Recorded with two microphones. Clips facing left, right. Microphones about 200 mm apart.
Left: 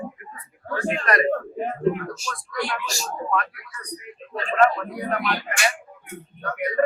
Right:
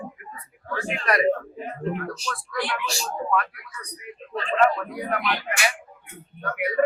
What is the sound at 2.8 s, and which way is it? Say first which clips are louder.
Speech: right 1 dB; 40° left (ahead or behind).